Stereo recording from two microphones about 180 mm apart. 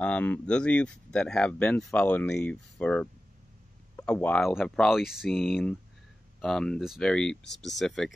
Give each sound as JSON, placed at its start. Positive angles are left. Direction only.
{"t": 0.0, "sound": "speech", "side_deg": 10}
{"t": 7.4, "sound": "speech", "side_deg": 75}
{"t": 7.7, "sound": "speech", "side_deg": 0}